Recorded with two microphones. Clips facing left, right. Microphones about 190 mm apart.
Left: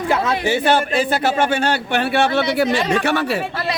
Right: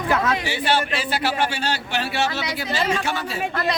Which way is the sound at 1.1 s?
50° left (ahead or behind).